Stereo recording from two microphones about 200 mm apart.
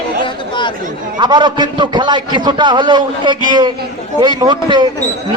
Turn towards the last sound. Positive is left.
turn(degrees=-20)  # may be behind; listen again after turning